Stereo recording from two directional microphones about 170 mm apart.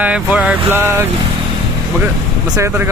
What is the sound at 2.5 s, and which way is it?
Speech, 15° right (ahead or behind).